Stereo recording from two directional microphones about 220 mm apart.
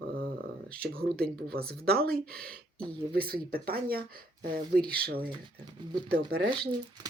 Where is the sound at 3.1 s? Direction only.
45° right (ahead or behind).